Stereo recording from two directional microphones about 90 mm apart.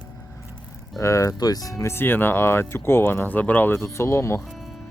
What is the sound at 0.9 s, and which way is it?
Speech, 35° left (ahead or behind).